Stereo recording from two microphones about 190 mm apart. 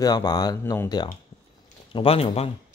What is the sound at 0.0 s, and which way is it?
Speech, 20° left (ahead or behind).